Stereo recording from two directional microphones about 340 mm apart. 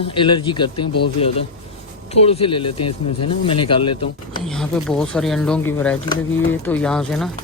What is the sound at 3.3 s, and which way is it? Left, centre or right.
Speech, centre.